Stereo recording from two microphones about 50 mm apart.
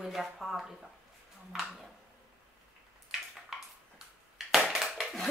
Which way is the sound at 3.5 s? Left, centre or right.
Centre.